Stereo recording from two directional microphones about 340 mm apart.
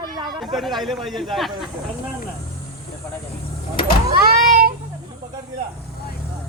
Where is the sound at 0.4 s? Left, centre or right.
Centre.